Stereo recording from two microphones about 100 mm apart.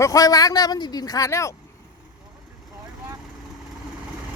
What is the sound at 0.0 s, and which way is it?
Speech, 35° left (ahead or behind).